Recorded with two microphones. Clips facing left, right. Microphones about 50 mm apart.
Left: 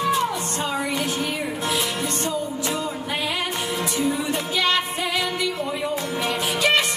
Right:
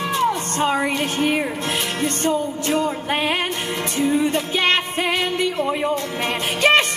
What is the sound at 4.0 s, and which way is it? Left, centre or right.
Music, right.